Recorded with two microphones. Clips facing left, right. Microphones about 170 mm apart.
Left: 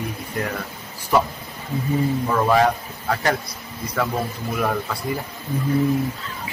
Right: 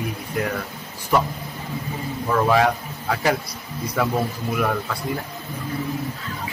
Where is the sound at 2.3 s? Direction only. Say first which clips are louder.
Right 1 dB; centre (ahead or behind).